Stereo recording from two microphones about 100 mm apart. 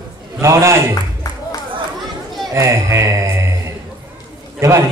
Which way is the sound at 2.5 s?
30° right (ahead or behind).